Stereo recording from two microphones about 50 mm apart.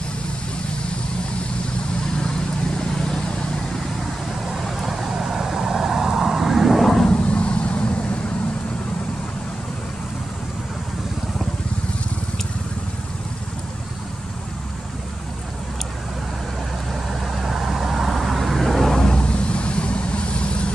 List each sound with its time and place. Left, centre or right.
4.5 s vehicle: centre
7.1 s vehicle: left
17.1 s vehicle: centre; by 20.7 s left